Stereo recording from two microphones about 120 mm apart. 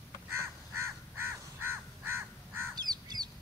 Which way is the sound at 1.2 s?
20° right (ahead or behind).